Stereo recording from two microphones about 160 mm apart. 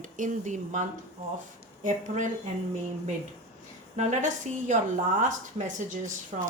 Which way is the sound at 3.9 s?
45° right (ahead or behind).